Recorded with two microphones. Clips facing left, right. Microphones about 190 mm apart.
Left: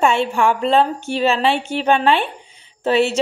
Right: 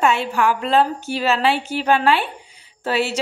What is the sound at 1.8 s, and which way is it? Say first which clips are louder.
A woman's voice: left 1 dB; 25° left (ahead or behind).